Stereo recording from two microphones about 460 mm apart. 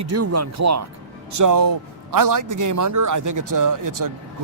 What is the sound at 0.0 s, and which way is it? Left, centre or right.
A man's voice, right.